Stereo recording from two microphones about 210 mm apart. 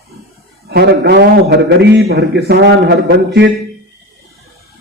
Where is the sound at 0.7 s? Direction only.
50° right (ahead or behind).